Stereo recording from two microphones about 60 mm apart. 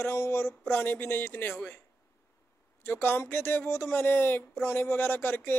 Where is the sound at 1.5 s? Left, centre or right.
Left.